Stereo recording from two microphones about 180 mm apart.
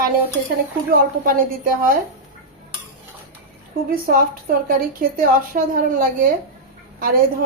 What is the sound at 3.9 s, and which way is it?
A woman's voice, 55° right (ahead or behind).